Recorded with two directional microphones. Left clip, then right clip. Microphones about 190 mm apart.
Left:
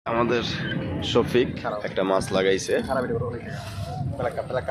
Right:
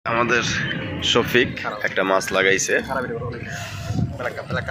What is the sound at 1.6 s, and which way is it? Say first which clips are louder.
Speech: right 2 dB; 45° left (ahead or behind).